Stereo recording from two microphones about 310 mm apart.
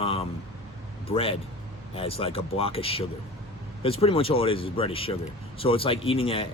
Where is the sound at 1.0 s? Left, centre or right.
Centre.